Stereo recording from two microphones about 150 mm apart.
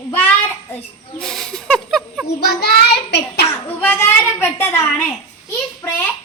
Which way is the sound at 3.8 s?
15° left (ahead or behind).